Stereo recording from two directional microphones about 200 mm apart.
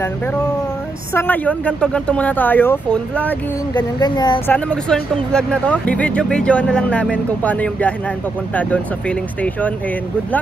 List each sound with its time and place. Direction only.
1.1 s speech: 10° left (ahead or behind)
3.7 s speech: 20° left (ahead or behind)
4.5 s speech: 5° left (ahead or behind)